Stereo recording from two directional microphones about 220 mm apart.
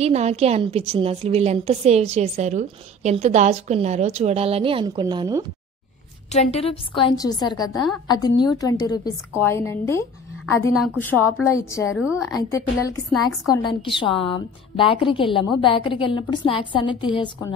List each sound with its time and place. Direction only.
0.0 s a woman's voice: 30° right (ahead or behind)
6.5 s a woman's voice: 25° left (ahead or behind)
10.4 s a woman's voice: centre (ahead or behind); by 17.6 s 20° left (ahead or behind)